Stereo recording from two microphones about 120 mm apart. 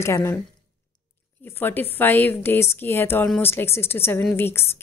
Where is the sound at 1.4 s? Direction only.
15° left (ahead or behind).